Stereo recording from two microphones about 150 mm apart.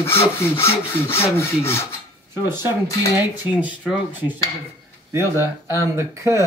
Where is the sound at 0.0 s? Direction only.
15° left (ahead or behind).